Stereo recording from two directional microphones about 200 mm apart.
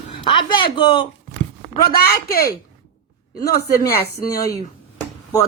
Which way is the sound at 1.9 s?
50° left (ahead or behind).